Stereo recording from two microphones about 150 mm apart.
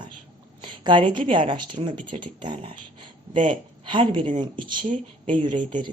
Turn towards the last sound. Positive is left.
turn(degrees=-30)  # may be behind; listen again after turning